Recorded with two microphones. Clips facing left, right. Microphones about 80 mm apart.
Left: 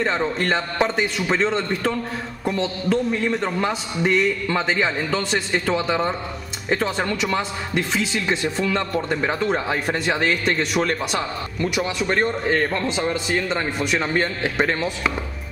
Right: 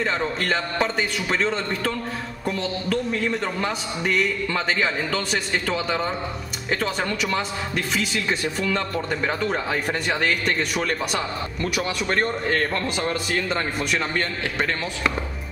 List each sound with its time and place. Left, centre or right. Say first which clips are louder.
0.0 s speech: left 3 dB; centre
2.4 s speech: left 3 dB; centre
10.0 s speech: left 3 dB; centre
11.7 s a man's voice: left 2 dB; centre